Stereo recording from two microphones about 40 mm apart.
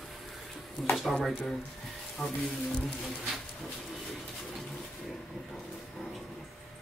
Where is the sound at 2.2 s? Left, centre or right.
Left.